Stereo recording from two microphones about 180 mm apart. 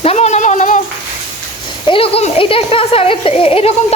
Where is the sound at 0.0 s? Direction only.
35° left (ahead or behind).